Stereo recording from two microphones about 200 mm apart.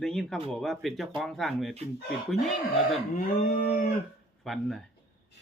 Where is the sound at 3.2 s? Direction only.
45° left (ahead or behind).